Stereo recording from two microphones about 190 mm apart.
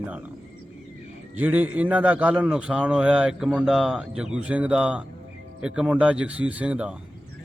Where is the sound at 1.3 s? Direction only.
10° right (ahead or behind).